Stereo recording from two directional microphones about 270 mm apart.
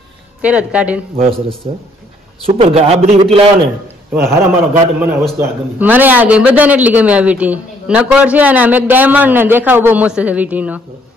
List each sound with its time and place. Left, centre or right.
0.4 s a man's voice: centre
2.4 s a man's voice: right
4.1 s a man's voice: centre